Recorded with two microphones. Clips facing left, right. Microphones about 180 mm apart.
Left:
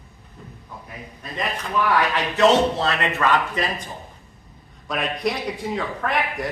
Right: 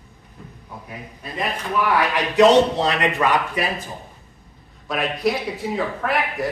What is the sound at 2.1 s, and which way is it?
Speech, 15° right (ahead or behind).